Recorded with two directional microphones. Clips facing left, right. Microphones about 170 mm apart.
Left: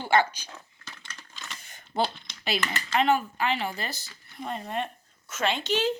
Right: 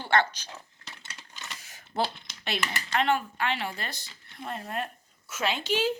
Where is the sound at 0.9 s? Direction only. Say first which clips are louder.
Right 1 dB; 30° right (ahead or behind).